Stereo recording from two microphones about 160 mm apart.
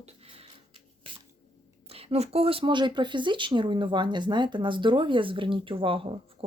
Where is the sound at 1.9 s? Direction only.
40° right (ahead or behind).